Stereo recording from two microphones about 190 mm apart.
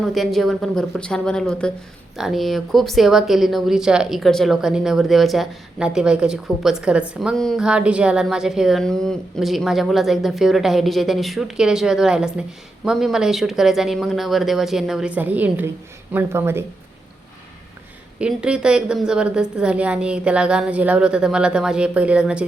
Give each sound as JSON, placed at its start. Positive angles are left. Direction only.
{"t": 0.0, "sound": "speech", "side_deg": 0}
{"t": 18.2, "sound": "speech", "side_deg": -5}